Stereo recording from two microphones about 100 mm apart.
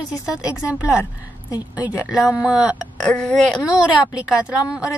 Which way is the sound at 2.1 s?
5° right (ahead or behind).